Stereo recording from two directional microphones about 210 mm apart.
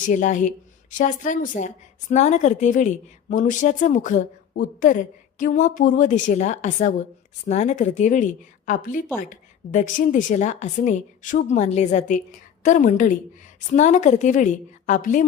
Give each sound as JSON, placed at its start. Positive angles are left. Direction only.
{"t": 0.1, "sound": "a woman's voice", "side_deg": 35}